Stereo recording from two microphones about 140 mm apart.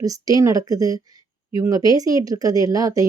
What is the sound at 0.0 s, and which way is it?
Speech, 25° right (ahead or behind).